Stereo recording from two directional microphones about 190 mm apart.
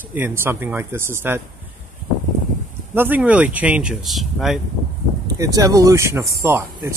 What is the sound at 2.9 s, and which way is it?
Speech, 10° right (ahead or behind).